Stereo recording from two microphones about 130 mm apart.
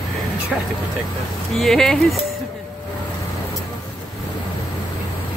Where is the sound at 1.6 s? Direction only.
5° left (ahead or behind).